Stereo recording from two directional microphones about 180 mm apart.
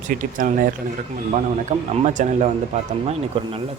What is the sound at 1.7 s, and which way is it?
Speech, 40° right (ahead or behind).